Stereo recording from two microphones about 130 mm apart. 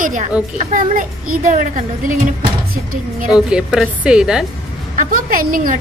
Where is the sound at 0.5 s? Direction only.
75° right (ahead or behind).